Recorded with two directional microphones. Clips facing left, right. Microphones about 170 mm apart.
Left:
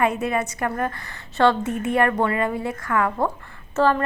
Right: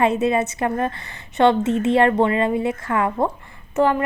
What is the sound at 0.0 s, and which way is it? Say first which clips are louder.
A woman's voice: right 4 dB; 25° right (ahead or behind).